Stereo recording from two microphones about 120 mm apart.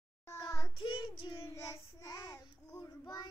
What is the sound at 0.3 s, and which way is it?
Child singing, 25° left (ahead or behind).